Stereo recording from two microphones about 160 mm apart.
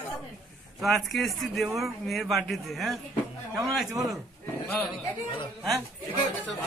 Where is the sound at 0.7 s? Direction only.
Centre (ahead or behind).